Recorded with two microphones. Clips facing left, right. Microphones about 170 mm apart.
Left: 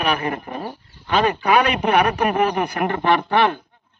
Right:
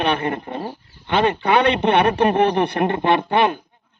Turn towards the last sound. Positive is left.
turn(degrees=-20)  # may be behind; listen again after turning